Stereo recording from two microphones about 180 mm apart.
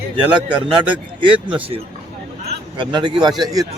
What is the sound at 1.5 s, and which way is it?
A man's voice, 30° right (ahead or behind).